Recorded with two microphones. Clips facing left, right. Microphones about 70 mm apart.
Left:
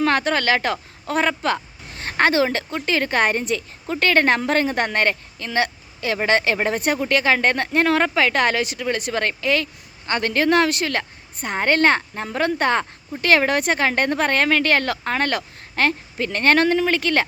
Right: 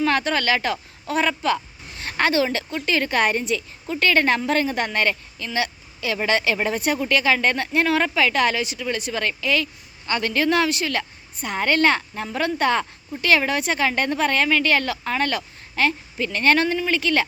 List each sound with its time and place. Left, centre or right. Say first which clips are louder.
0.0 s a woman's voice: left 2 dB; left